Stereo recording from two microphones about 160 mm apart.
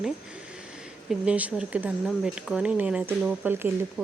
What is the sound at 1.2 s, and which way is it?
Speech, 5° right (ahead or behind).